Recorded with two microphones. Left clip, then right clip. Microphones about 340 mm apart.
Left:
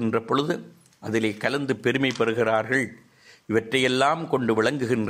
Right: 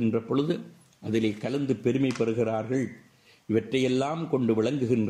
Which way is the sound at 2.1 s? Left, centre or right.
Left.